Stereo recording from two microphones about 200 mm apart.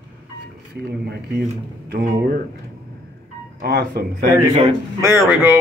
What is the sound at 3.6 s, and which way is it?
Speech, 50° right (ahead or behind).